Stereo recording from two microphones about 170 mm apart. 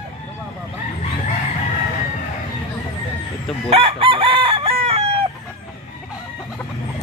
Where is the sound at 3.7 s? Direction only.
30° right (ahead or behind).